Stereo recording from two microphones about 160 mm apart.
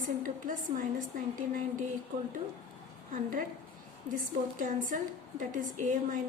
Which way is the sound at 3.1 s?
55° right (ahead or behind).